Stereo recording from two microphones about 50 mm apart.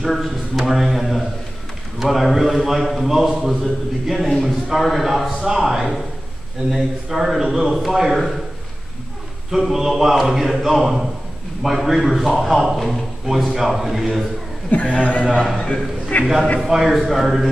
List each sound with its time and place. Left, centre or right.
0.0 s a man's voice: centre
9.5 s a man's voice: centre
14.9 s a man's voice: centre
15.5 s a man's voice: centre
16.1 s a man's voice: left
16.5 s a man's voice: centre